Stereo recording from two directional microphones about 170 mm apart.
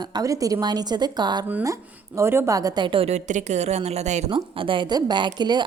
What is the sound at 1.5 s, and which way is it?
A woman's voice, 15° right (ahead or behind).